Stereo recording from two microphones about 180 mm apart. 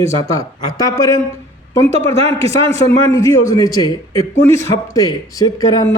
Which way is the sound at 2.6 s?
15° left (ahead or behind).